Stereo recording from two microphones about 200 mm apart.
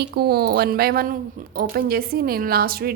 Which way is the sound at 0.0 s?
55° right (ahead or behind).